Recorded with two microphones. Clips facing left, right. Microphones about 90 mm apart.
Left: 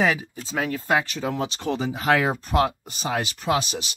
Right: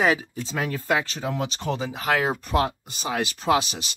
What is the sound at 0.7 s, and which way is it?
Speech, 35° left (ahead or behind).